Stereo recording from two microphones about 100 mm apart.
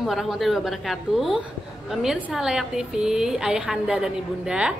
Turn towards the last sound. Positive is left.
turn(degrees=-10)  # may be behind; listen again after turning